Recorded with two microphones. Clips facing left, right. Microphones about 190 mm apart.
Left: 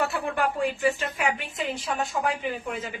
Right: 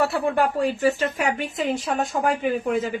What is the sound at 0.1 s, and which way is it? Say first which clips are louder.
A woman's voice: right 5 dB; 40° right (ahead or behind).